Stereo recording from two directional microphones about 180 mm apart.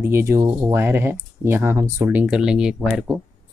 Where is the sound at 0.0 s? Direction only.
15° right (ahead or behind).